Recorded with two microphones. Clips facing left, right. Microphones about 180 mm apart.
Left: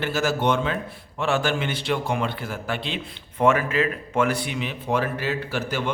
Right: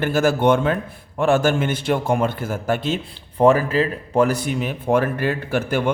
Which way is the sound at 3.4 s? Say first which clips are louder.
Right 5 dB; 35° right (ahead or behind).